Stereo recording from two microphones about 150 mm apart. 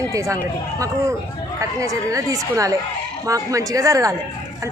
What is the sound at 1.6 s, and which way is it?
A woman's voice, 20° right (ahead or behind).